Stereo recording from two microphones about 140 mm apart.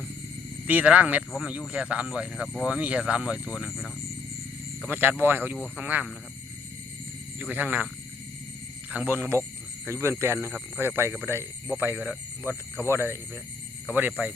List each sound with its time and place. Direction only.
0.7 s speech: 10° right (ahead or behind)
4.9 s speech: 15° right (ahead or behind)
7.3 s speech: 10° right (ahead or behind)
8.9 s speech: 10° right (ahead or behind)